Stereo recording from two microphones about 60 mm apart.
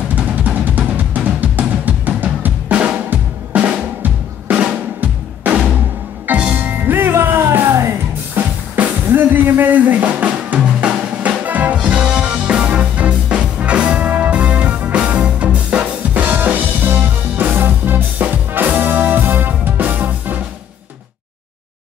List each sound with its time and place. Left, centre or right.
0.1 s drum: right
2.7 s drum: centre
6.5 s music: right
8.4 s music: right
8.7 s drum: right
16.1 s music: right